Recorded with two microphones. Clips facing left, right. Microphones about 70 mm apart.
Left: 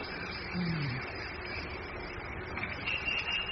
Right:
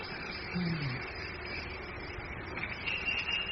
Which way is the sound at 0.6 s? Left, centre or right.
Left.